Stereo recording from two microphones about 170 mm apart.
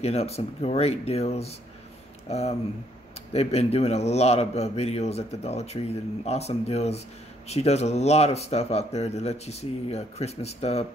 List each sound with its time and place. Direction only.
0.0 s speech: 40° left (ahead or behind)